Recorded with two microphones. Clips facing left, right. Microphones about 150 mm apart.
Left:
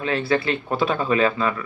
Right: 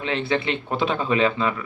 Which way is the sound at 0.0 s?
20° right (ahead or behind).